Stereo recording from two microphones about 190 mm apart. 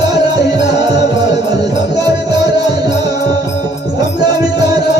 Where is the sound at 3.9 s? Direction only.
20° right (ahead or behind).